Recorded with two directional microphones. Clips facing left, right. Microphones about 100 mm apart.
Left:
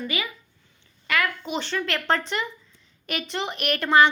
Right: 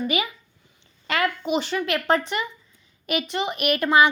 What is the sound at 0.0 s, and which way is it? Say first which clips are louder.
Speech: right 5 dB; 20° right (ahead or behind).